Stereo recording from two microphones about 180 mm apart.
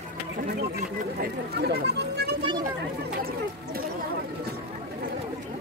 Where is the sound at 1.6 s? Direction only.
65° right (ahead or behind).